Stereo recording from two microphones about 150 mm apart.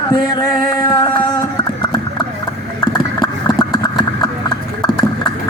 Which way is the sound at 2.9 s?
30° left (ahead or behind).